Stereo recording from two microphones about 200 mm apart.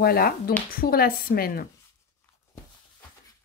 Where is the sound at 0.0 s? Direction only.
50° left (ahead or behind).